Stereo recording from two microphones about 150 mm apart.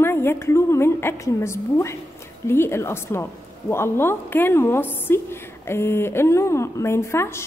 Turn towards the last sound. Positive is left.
turn(degrees=15)  # may be behind; listen again after turning